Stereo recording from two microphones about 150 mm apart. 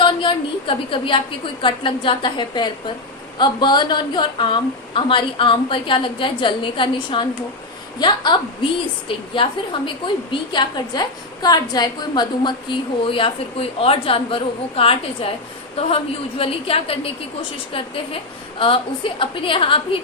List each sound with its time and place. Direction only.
0.0 s a woman's voice: 35° left (ahead or behind)
16.4 s a woman's voice: 40° left (ahead or behind)